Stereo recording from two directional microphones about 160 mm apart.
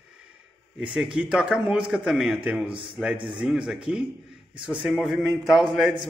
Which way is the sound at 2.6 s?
35° right (ahead or behind).